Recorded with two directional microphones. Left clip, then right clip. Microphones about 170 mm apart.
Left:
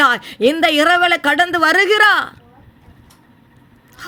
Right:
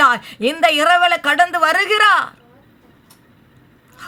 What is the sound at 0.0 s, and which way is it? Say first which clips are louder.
A man's voice: left 1 dB; 20° left (ahead or behind).